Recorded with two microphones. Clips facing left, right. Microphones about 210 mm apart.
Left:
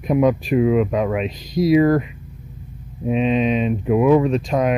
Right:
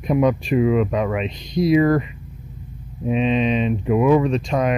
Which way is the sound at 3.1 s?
Centre (ahead or behind).